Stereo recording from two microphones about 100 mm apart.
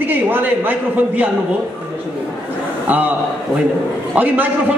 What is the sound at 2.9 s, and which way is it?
Speech, 15° right (ahead or behind).